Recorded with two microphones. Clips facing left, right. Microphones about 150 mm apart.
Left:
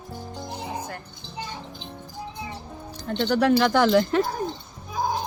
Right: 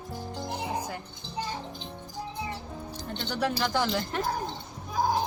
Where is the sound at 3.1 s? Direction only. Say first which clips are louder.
Left 10 dB; 70° left (ahead or behind); by 4.3 s 90° left.